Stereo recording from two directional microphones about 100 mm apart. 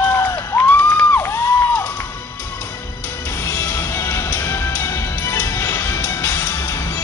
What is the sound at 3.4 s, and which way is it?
Music, 30° left (ahead or behind).